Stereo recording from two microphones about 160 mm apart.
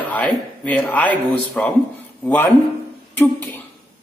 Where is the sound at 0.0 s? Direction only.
10° left (ahead or behind).